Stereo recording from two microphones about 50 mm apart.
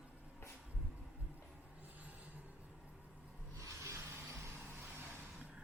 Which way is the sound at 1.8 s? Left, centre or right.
Right.